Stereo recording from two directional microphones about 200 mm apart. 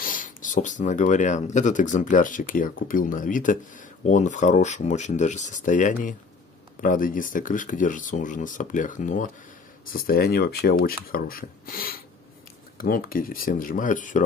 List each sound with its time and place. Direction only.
0.0 s speech: 40° left (ahead or behind)